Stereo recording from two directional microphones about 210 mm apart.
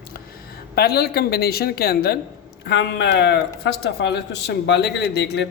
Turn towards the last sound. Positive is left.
turn(degrees=55)  # may be behind; listen again after turning